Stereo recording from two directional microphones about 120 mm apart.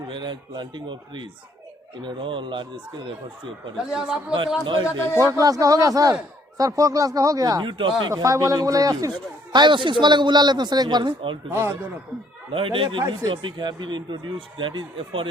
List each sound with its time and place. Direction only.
0.1 s speech: 40° right (ahead or behind)
3.8 s a man's voice: 5° right (ahead or behind)
4.6 s speech: 45° right (ahead or behind)
4.9 s a man's voice: 20° left (ahead or behind)
5.2 s speech: 30° right (ahead or behind)
8.1 s speech: 25° right (ahead or behind); by 11.3 s 40° right (ahead or behind)
12.5 s speech: 45° right (ahead or behind)